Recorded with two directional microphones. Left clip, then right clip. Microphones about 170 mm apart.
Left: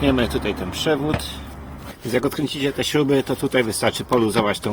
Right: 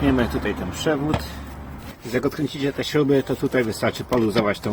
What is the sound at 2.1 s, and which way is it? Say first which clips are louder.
Speech: left 2 dB; 45° left (ahead or behind).